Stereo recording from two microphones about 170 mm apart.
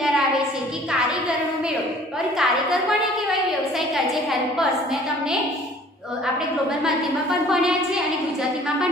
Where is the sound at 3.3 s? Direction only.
Centre (ahead or behind).